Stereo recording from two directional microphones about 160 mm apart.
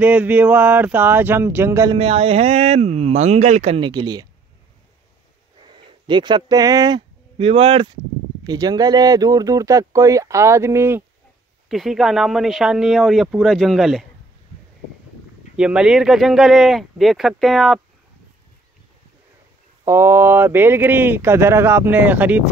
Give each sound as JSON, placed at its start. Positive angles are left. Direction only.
{"t": 0.0, "sound": "speech", "side_deg": -10}
{"t": 2.0, "sound": "speech", "side_deg": -35}
{"t": 3.9, "sound": "speech", "side_deg": -25}
{"t": 5.7, "sound": "speech", "side_deg": -30}
{"t": 11.7, "sound": "speech", "side_deg": 0}
{"t": 15.5, "sound": "speech", "side_deg": -5}
{"t": 19.8, "sound": "speech", "side_deg": -15}